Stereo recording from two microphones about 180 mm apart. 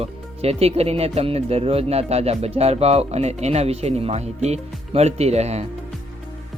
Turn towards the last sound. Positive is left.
turn(degrees=-35)  # may be behind; listen again after turning